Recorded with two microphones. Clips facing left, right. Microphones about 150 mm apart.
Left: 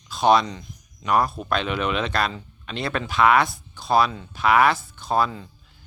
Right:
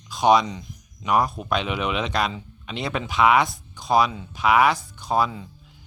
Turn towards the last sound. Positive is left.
turn(degrees=-5)  # may be behind; listen again after turning